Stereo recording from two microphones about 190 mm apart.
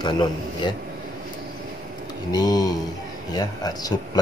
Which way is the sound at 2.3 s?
20° left (ahead or behind).